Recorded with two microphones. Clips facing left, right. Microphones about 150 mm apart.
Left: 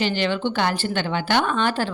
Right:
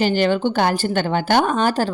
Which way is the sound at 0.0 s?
45° right (ahead or behind).